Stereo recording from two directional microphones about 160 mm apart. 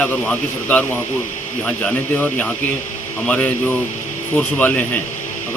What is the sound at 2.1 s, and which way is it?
A man's voice, 10° left (ahead or behind).